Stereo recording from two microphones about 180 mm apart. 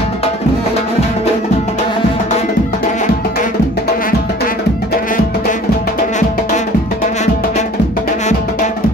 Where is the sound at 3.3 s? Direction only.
55° left (ahead or behind).